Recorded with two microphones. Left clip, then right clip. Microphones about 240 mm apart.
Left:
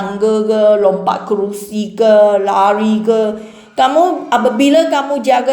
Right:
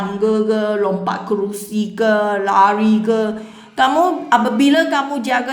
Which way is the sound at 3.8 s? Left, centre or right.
Right.